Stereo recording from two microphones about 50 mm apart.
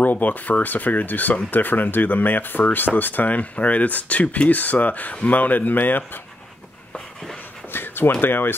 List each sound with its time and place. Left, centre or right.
0.0 s speech: left
7.7 s a sound: left
8.1 s speech: left